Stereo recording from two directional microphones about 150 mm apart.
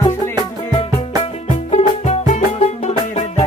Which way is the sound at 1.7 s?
50° left (ahead or behind).